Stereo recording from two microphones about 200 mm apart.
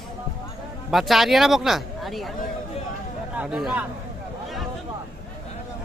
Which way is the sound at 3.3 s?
5° right (ahead or behind).